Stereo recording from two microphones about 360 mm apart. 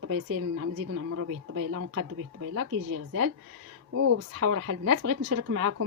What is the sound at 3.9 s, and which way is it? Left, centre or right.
Speech, right.